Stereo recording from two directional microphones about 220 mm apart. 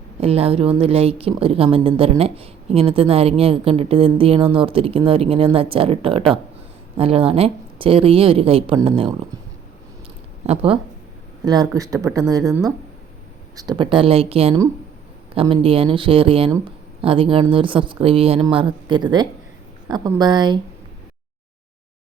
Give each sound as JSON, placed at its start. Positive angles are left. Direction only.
{"t": 0.2, "sound": "speech", "side_deg": -25}
{"t": 10.4, "sound": "speech", "side_deg": -25}
{"t": 12.4, "sound": "speech", "side_deg": 0}
{"t": 13.6, "sound": "speech", "side_deg": -20}